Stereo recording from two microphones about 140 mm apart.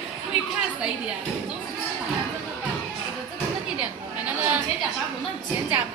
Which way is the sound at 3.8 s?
10° right (ahead or behind).